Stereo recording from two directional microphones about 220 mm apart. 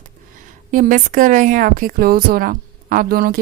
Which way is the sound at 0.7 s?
35° right (ahead or behind).